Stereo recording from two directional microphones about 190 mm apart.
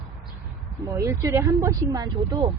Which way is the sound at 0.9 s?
15° right (ahead or behind).